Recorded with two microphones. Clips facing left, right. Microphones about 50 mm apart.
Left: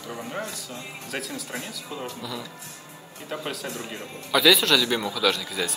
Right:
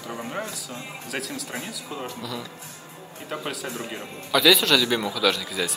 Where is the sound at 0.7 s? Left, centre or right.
Centre.